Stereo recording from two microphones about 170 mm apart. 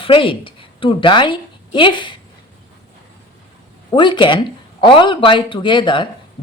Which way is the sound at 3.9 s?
30° left (ahead or behind).